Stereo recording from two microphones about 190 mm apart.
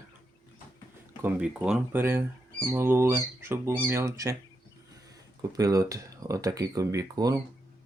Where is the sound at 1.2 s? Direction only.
5° right (ahead or behind).